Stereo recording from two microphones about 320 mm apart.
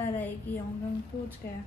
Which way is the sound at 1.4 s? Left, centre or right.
Left.